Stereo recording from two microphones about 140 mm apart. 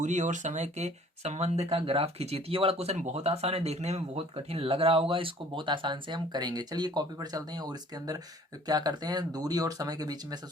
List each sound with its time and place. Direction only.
0.0 s speech: 60° right (ahead or behind); by 10.4 s 30° right (ahead or behind)